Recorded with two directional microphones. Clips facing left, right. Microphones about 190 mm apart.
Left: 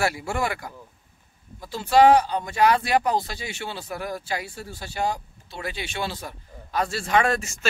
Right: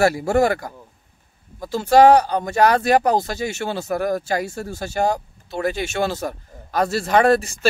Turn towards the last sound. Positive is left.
turn(degrees=-35)  # may be behind; listen again after turning